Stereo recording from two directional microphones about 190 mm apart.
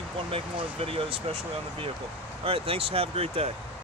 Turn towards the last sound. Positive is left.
turn(degrees=-30)  # may be behind; listen again after turning